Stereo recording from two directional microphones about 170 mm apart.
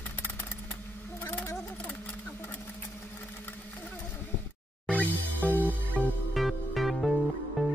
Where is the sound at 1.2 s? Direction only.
10° left (ahead or behind).